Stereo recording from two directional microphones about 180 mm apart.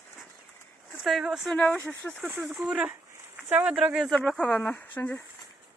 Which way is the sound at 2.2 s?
10° right (ahead or behind).